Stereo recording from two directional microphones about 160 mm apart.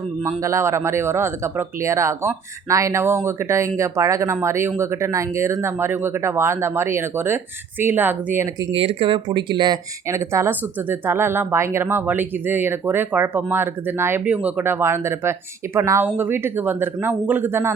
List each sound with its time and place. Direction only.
0.4 s speech: 20° right (ahead or behind)
8.8 s speech: 35° right (ahead or behind)
10.1 s speech: 15° right (ahead or behind)